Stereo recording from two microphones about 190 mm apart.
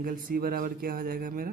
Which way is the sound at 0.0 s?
45° right (ahead or behind).